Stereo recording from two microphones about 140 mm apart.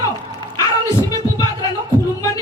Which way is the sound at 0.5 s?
25° left (ahead or behind).